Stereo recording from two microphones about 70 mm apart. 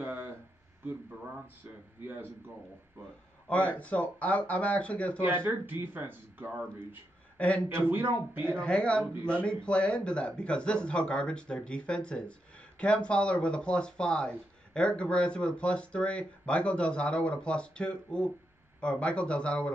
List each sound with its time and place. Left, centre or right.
0.0 s a sound: right
3.4 s speech: centre
5.2 s speech: right
7.3 s speech: centre
7.8 s speech: right
8.5 s a man's voice: centre